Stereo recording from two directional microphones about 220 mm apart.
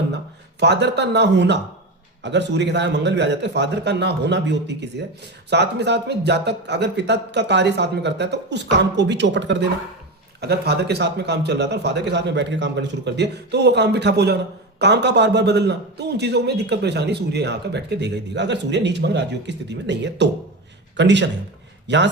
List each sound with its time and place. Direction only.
0.6 s a man's voice: 50° right (ahead or behind)